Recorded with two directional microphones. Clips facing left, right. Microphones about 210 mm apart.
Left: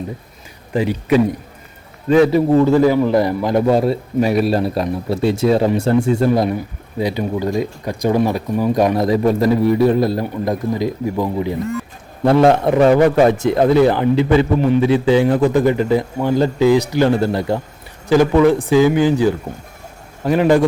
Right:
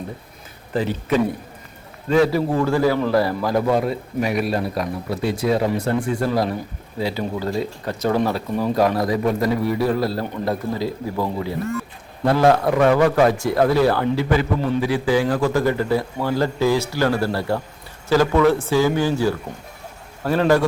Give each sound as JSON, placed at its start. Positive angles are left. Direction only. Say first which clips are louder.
{"t": 0.7, "sound": "a man's voice", "louder": "left 5 dB", "side_deg": 10}